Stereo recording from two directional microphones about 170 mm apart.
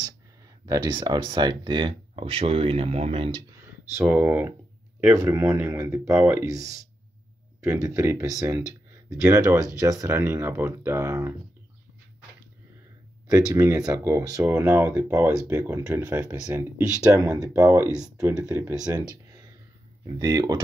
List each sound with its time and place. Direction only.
0.7 s speech: 25° right (ahead or behind)
3.9 s speech: 10° right (ahead or behind)
13.3 s speech: 15° right (ahead or behind)
18.9 s a sound: 20° right (ahead or behind)
20.2 s speech: 20° right (ahead or behind)